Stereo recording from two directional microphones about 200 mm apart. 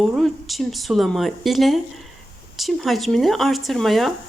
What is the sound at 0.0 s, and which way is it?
Speech, centre (ahead or behind).